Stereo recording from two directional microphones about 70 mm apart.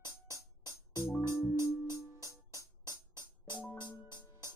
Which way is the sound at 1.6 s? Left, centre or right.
Left.